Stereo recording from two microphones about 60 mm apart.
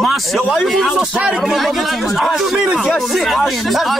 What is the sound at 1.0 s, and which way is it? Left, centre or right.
Speech, centre.